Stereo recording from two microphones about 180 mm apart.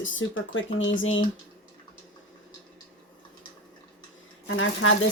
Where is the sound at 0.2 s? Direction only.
90° left.